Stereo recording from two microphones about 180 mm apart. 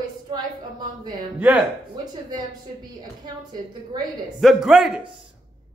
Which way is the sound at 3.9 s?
20° right (ahead or behind).